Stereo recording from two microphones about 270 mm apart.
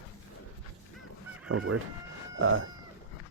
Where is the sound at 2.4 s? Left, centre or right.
Right.